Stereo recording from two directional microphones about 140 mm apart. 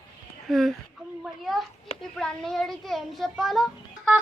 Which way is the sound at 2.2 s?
5° left (ahead or behind).